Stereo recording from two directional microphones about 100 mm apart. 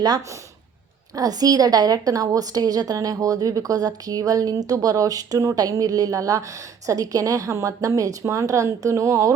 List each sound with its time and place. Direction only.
0.0 s a woman's voice: 40° right (ahead or behind)